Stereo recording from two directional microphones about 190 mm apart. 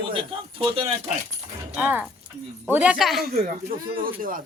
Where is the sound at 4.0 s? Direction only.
45° right (ahead or behind).